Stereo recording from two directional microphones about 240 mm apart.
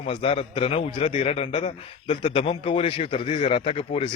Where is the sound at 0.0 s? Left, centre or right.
Left.